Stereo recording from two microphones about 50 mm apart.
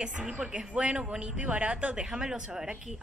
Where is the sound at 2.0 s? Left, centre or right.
Centre.